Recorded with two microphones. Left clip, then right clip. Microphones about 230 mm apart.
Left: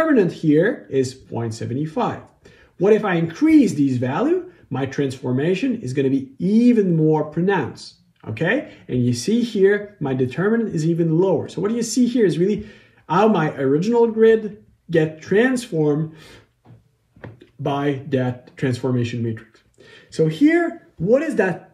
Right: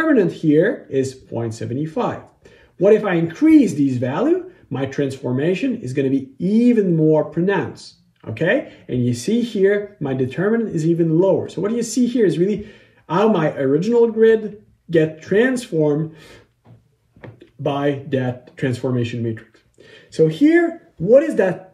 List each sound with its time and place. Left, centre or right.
0.0 s speech: centre
17.7 s speech: centre